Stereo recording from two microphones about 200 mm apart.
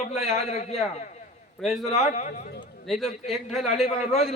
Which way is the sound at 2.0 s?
35° left (ahead or behind).